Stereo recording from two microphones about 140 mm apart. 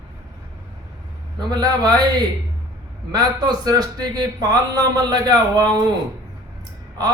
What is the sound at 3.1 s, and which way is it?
A man's voice, 30° right (ahead or behind).